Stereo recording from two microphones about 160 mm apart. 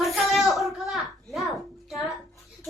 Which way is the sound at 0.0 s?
Centre (ahead or behind).